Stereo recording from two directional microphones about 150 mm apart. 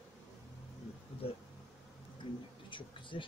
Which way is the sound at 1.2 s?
40° left (ahead or behind).